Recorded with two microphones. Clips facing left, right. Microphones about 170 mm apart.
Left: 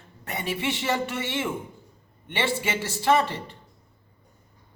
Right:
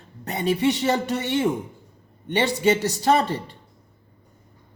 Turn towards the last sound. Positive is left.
turn(degrees=-35)  # may be behind; listen again after turning